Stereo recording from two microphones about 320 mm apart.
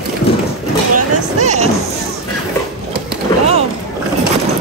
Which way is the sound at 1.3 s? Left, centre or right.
Right.